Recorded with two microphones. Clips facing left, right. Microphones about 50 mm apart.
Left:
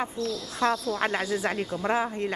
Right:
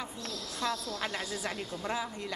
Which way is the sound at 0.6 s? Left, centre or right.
Left.